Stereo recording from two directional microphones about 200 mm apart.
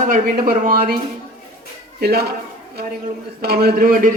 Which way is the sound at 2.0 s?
50° right (ahead or behind).